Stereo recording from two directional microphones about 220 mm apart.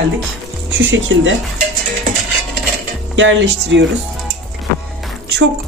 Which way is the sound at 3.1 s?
60° right (ahead or behind).